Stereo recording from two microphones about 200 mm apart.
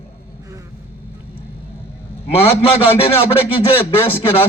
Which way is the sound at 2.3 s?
30° left (ahead or behind).